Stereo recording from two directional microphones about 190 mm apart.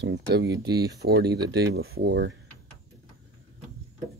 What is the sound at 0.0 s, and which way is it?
Speech, 65° right (ahead or behind).